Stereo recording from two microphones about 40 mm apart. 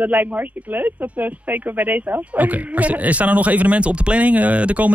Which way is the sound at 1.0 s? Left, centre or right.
Right.